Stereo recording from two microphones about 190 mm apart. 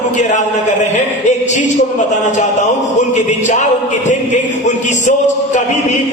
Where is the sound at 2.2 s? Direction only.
40° left (ahead or behind).